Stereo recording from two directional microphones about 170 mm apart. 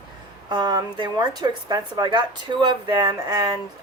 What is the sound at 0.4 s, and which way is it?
Speech, 25° right (ahead or behind).